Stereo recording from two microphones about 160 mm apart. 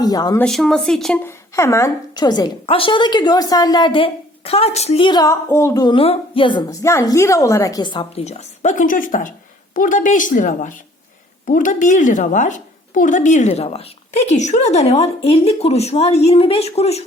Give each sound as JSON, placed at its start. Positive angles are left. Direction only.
{"t": 0.0, "sound": "a woman's voice", "side_deg": 25}
{"t": 0.3, "sound": "speech", "side_deg": 5}
{"t": 1.2, "sound": "a woman's voice", "side_deg": 15}
{"t": 8.2, "sound": "a woman's voice", "side_deg": 45}